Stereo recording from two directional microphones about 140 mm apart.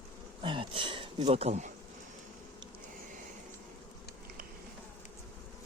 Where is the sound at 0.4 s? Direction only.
40° right (ahead or behind); by 1.7 s 55° right (ahead or behind).